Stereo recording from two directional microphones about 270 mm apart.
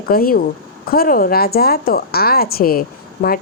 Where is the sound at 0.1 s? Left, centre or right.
Left.